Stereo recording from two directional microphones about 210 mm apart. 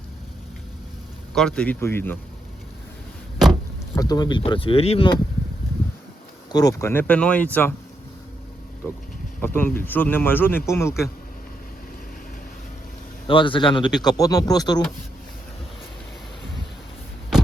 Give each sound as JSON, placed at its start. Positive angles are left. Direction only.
{"t": 1.4, "sound": "speech", "side_deg": 5}
{"t": 3.4, "sound": "vehicle", "side_deg": 0}
{"t": 3.9, "sound": "speech", "side_deg": 20}
{"t": 6.5, "sound": "speech", "side_deg": 15}
{"t": 9.4, "sound": "speech", "side_deg": 10}
{"t": 13.2, "sound": "speech", "side_deg": 25}